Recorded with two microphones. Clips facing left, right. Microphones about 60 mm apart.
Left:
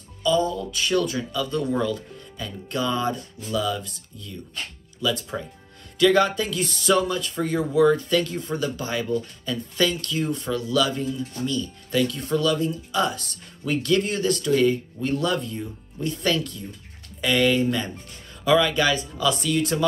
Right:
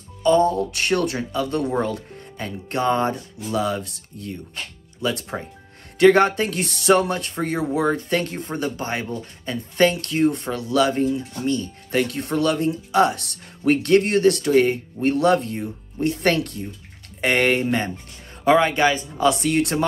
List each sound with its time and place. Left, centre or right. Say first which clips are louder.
0.2 s speech: right 5 dB; right
19.2 s speech: right 4 dB; right